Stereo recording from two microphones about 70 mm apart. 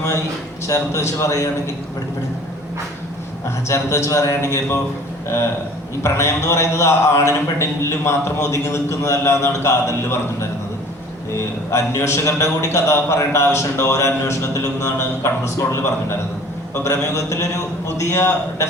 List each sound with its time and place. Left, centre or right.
0.7 s speech: left
3.7 s speech: left
6.0 s speech: left
11.3 s a man's voice: left